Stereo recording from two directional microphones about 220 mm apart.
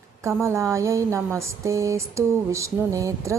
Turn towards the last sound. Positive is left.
turn(degrees=-15)  # may be behind; listen again after turning